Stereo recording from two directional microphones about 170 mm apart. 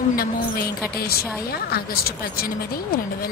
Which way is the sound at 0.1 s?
60° left (ahead or behind).